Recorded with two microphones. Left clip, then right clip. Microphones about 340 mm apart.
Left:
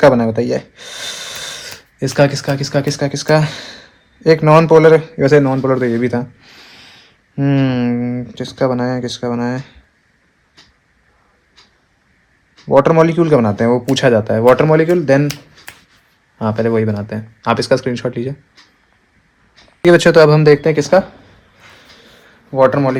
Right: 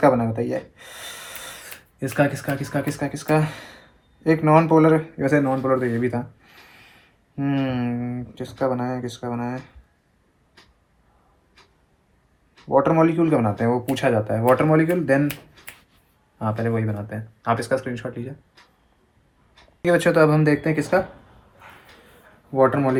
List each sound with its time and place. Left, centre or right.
0.0 s a man's voice: left
12.8 s a man's voice: left
16.4 s a man's voice: left
19.8 s a man's voice: left
22.5 s a man's voice: left